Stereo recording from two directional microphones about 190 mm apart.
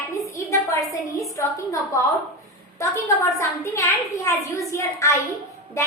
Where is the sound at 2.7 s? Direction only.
15° left (ahead or behind).